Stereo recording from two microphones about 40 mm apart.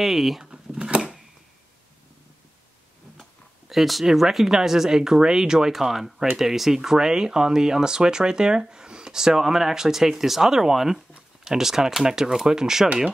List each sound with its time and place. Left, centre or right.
0.0 s speech: centre
0.5 s a sound: centre
3.2 s speech: centre